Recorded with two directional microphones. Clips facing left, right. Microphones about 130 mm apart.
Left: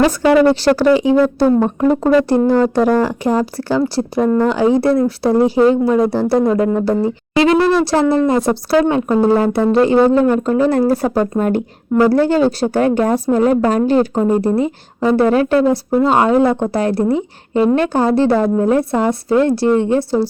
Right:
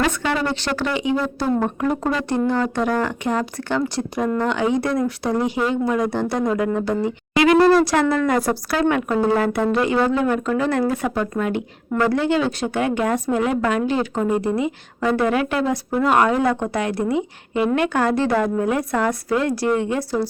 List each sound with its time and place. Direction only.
0.0 s a woman's voice: 40° left (ahead or behind)
1.5 s a sound: 25° left (ahead or behind)
2.3 s a woman's voice: 35° left (ahead or behind)
2.9 s speech: 5° left (ahead or behind)
3.2 s a woman's voice: 35° left (ahead or behind)
7.6 s speech: centre (ahead or behind)
7.9 s a woman's voice: 30° left (ahead or behind)